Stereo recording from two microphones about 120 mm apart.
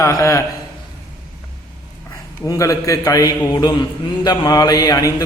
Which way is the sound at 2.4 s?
25° left (ahead or behind).